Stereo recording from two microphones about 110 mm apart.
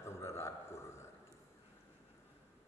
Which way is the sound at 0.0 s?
25° left (ahead or behind).